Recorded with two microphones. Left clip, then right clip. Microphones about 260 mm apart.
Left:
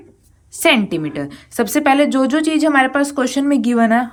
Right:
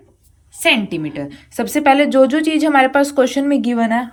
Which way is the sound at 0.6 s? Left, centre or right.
Centre.